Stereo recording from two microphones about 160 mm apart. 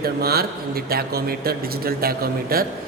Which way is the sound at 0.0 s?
75° right (ahead or behind).